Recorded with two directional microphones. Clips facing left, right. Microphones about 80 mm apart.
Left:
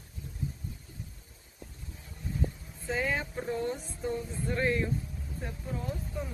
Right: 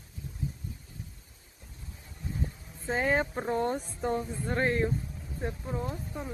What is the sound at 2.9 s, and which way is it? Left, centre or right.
Speech, right.